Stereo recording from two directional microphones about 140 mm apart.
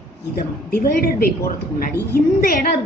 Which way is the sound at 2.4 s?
90° left.